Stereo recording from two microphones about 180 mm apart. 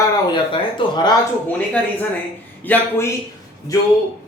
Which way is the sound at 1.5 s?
10° left (ahead or behind).